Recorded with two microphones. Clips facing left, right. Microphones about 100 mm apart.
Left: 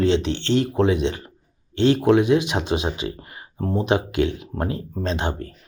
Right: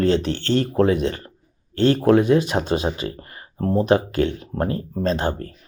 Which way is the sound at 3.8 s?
20° left (ahead or behind).